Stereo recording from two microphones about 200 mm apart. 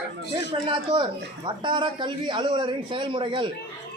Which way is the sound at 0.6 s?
25° right (ahead or behind).